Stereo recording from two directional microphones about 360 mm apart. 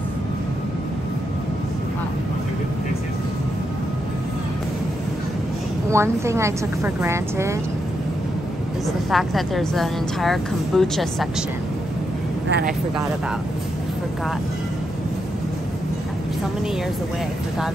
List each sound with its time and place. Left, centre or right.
5.9 s a woman's voice: centre
9.1 s a woman's voice: centre
12.4 s speech: right